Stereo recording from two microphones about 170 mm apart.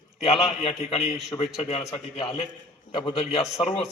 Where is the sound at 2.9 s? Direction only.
30° left (ahead or behind).